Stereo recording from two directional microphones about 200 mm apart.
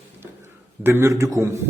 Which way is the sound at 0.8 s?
10° right (ahead or behind).